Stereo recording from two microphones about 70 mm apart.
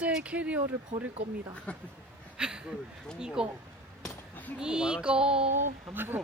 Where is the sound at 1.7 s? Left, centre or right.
Centre.